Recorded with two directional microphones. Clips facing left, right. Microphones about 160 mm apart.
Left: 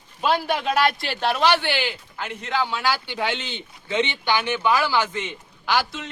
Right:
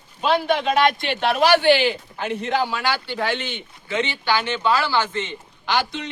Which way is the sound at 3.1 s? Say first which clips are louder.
Right 2 dB; 15° left (ahead or behind).